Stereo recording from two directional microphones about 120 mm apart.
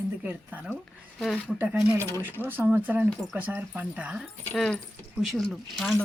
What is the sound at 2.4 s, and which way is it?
Speech, 15° right (ahead or behind).